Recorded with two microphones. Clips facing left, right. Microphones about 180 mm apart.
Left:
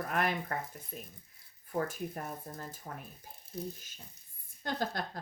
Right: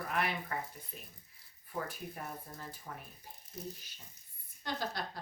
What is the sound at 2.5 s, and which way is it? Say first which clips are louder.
Speech: left 3 dB; 45° left (ahead or behind).